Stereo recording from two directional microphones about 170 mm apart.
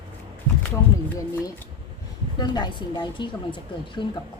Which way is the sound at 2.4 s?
25° left (ahead or behind).